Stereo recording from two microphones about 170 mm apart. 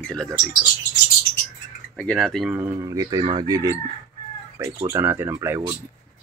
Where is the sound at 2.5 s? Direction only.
15° right (ahead or behind).